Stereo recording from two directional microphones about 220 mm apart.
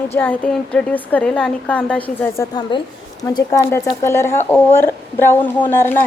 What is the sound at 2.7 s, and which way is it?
A woman's voice, 20° left (ahead or behind).